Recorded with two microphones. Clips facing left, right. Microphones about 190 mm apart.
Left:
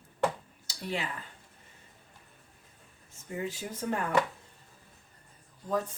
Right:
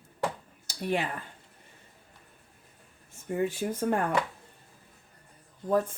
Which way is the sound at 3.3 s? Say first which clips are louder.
Right 7 dB; 50° right (ahead or behind).